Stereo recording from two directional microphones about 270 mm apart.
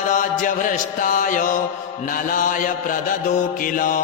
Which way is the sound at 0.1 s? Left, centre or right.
Left.